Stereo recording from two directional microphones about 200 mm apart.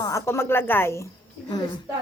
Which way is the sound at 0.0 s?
15° left (ahead or behind).